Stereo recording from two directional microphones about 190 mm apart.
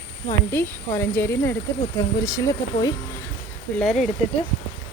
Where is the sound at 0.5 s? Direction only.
10° left (ahead or behind).